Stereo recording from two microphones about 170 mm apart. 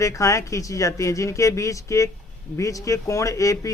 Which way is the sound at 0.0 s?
20° left (ahead or behind).